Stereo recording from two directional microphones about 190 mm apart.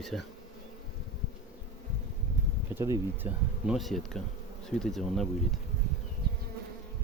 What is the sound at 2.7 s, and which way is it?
Speech, 15° right (ahead or behind).